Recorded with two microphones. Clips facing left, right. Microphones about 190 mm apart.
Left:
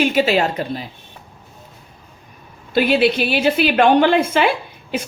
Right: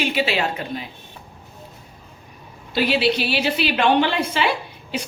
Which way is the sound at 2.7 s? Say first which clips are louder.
Left 4 dB; 50° left (ahead or behind).